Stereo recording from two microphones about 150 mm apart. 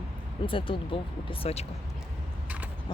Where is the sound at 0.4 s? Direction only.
35° left (ahead or behind).